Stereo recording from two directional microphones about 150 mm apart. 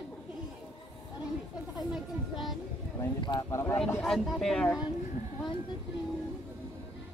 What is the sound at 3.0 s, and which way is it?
Speech, 30° left (ahead or behind).